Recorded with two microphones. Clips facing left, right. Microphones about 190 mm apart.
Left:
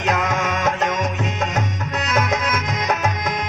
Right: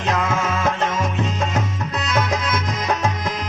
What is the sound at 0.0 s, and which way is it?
Music, 30° right (ahead or behind).